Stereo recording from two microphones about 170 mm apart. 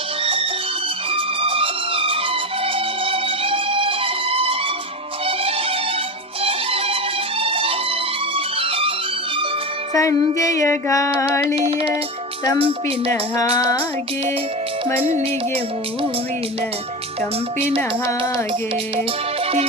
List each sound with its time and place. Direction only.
0.2 s music: 35° right (ahead or behind)
9.9 s music: 20° left (ahead or behind)
10.6 s female singing: 20° left (ahead or behind)
11.5 s music: 35° right (ahead or behind)
13.1 s female singing: 15° left (ahead or behind)
14.9 s music: 35° right (ahead or behind)